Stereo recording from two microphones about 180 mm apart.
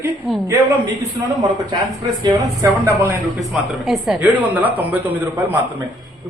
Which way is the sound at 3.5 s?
Centre (ahead or behind).